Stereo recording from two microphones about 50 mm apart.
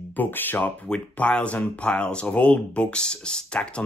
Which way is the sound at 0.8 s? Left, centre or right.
Centre.